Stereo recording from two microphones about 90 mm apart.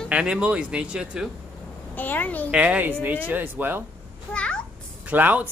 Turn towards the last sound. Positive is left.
turn(degrees=-20)  # may be behind; listen again after turning